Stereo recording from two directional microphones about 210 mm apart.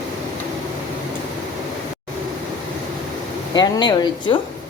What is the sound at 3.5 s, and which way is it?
Speech, 20° left (ahead or behind).